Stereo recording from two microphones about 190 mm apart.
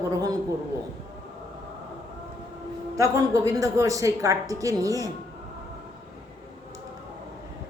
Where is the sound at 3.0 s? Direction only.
15° right (ahead or behind).